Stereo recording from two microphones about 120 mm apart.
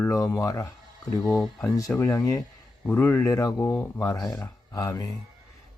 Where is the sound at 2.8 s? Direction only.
15° left (ahead or behind).